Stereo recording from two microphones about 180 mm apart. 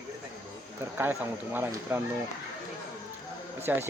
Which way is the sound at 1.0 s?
10° right (ahead or behind).